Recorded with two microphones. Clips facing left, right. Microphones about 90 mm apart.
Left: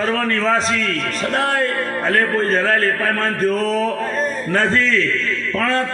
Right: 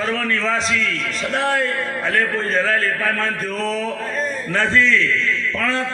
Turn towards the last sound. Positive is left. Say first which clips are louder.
# left 3 dB
turn(degrees=45)  # may be behind; listen again after turning